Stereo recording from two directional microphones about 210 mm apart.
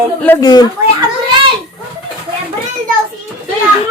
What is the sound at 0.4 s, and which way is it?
Speech, 20° left (ahead or behind).